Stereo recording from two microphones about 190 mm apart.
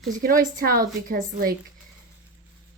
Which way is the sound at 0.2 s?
50° right (ahead or behind).